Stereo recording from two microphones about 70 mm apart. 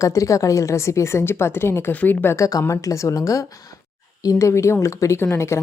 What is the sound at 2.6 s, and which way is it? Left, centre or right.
A woman's voice, left.